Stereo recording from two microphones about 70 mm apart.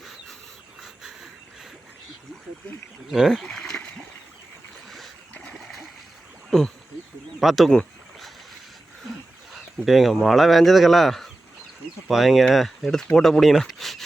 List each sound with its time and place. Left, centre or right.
3.1 s speech: centre
3.4 s splash: centre
4.9 s boat: centre
5.3 s splash: centre
5.5 s splash: centre
6.5 s speech: centre
9.8 s speech: centre